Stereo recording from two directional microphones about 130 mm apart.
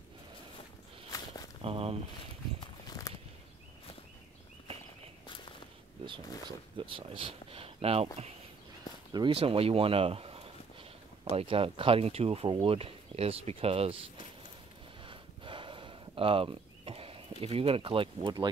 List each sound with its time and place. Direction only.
1.1 s walk: 30° left (ahead or behind)
1.6 s a sound: 50° right (ahead or behind)
2.6 s walk: 30° left (ahead or behind)
6.8 s speech: 40° right (ahead or behind)
9.1 s speech: 40° right (ahead or behind)
15.0 s a sound: 40° right (ahead or behind)